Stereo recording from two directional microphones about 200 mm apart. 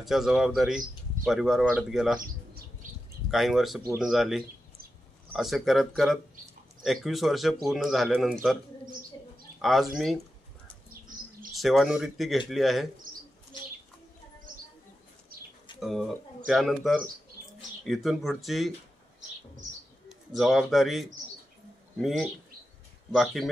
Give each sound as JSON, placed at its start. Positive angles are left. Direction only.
{"t": 0.0, "sound": "speech", "side_deg": 0}
{"t": 2.2, "sound": "bird", "side_deg": -45}
{"t": 3.3, "sound": "speech", "side_deg": 0}
{"t": 9.6, "sound": "speech", "side_deg": 0}
{"t": 11.1, "sound": "bird", "side_deg": -40}
{"t": 11.5, "sound": "speech", "side_deg": 0}
{"t": 15.8, "sound": "speech", "side_deg": 0}
{"t": 20.1, "sound": "speech", "side_deg": 0}